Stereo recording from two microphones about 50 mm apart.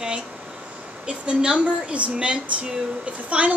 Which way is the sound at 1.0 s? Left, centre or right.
Right.